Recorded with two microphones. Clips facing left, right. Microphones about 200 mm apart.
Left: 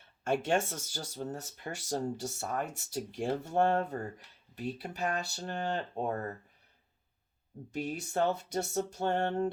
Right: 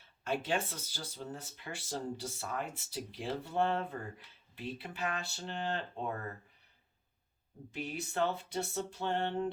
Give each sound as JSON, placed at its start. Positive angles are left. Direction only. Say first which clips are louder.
{"t": 0.3, "sound": "speech", "louder": "left 5 dB", "side_deg": 45}
{"t": 7.7, "sound": "speech", "louder": "left 4 dB", "side_deg": 45}